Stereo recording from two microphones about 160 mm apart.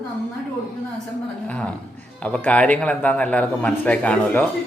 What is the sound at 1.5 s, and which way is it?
A man's voice, 10° left (ahead or behind).